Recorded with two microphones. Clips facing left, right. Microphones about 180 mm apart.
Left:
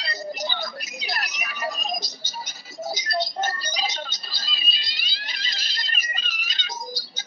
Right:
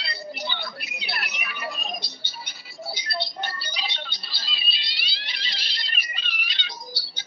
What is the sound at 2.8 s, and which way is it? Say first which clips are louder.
Music: left 5 dB; 45° left (ahead or behind).